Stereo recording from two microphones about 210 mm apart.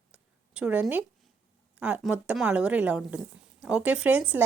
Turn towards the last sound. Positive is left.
turn(degrees=-5)  # may be behind; listen again after turning